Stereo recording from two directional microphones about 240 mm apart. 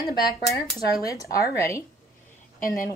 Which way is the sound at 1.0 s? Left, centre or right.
Centre.